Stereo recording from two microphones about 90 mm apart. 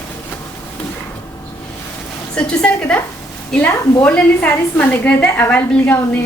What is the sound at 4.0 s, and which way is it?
A woman's voice, 15° left (ahead or behind).